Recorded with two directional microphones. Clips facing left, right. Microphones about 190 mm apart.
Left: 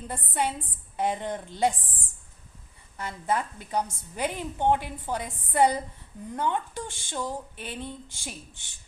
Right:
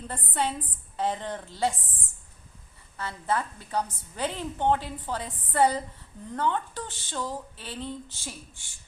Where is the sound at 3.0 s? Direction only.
15° left (ahead or behind).